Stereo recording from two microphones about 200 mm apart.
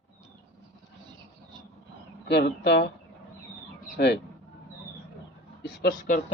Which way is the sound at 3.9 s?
60° left (ahead or behind).